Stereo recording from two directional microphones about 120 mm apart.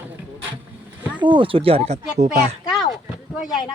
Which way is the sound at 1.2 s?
45° right (ahead or behind).